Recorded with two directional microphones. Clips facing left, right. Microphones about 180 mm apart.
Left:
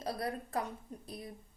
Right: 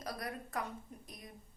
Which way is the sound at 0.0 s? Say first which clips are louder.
Left 5 dB; 30° left (ahead or behind).